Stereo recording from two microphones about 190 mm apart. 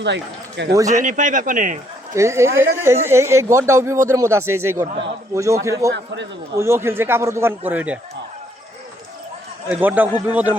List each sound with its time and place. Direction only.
0.0 s a man's voice: 65° right (ahead or behind)
1.0 s speech: 40° right (ahead or behind)
2.1 s speech: 15° right (ahead or behind)
9.6 s speech: 10° right (ahead or behind)